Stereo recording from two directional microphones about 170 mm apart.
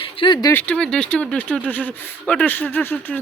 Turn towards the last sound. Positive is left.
turn(degrees=10)  # may be behind; listen again after turning